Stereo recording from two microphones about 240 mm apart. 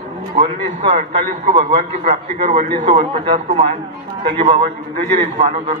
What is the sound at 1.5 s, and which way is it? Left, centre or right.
A man's voice, right.